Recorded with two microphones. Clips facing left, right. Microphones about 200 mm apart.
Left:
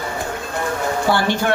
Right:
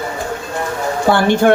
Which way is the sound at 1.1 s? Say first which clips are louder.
Right 8 dB; 55° right (ahead or behind).